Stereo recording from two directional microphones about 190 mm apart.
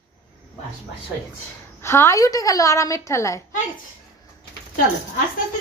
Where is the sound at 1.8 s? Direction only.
15° left (ahead or behind).